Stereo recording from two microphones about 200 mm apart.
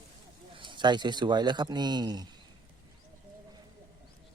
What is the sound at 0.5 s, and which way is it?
Speech, 25° right (ahead or behind).